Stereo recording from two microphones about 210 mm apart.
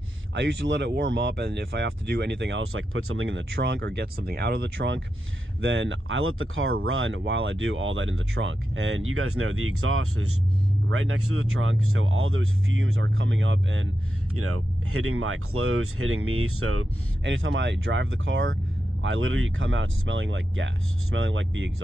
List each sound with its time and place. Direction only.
0.3 s speech: 55° right (ahead or behind)
14.3 s speech: 90° right; by 21.8 s 60° right (ahead or behind)